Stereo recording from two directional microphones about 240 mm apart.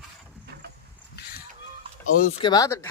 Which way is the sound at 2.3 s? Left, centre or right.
Centre.